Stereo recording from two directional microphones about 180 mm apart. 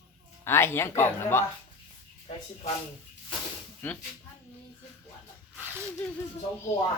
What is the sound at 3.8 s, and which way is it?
Speech, 10° left (ahead or behind).